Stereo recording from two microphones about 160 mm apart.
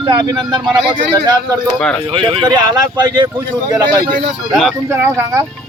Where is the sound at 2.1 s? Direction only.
30° right (ahead or behind).